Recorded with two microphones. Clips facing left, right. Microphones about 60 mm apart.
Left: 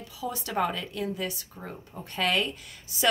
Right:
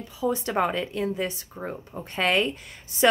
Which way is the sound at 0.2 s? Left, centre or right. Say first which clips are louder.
Right 4 dB; right.